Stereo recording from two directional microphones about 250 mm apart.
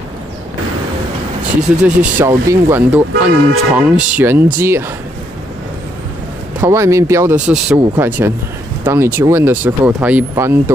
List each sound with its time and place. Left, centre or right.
1.8 s speech: centre
6.6 s speech: centre